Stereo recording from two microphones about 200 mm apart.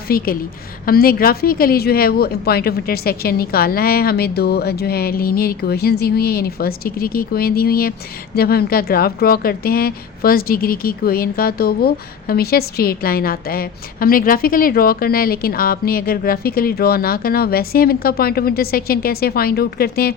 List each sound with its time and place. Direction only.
0.1 s speech: 50° left (ahead or behind)